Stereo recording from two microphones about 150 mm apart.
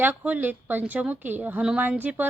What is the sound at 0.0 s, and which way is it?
A woman's voice, 10° right (ahead or behind).